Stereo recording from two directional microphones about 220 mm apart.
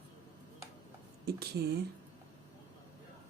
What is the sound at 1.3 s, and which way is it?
Speech, 45° right (ahead or behind).